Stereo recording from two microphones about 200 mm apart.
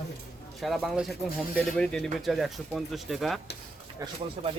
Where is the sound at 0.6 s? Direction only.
Centre (ahead or behind).